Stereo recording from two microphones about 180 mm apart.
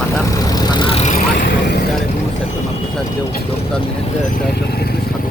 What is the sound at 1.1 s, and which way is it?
Vehicle, 45° left (ahead or behind).